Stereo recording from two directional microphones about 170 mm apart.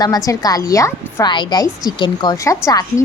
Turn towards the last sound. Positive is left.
turn(degrees=20)  # may be behind; listen again after turning